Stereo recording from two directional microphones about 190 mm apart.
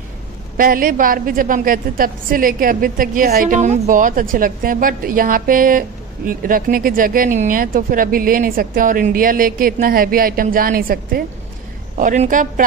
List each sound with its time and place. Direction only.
0.6 s a woman's voice: 50° right (ahead or behind)